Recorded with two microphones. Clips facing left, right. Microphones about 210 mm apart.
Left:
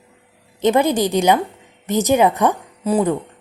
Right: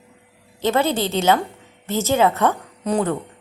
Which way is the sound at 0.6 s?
15° left (ahead or behind).